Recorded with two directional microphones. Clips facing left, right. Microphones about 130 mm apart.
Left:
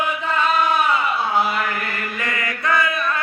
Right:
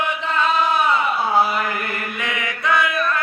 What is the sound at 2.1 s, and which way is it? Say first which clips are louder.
Chant: even; centre (ahead or behind).